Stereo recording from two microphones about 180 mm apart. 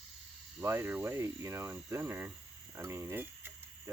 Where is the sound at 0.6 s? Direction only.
15° right (ahead or behind).